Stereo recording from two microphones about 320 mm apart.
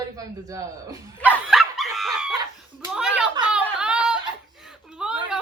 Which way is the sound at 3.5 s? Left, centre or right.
Centre.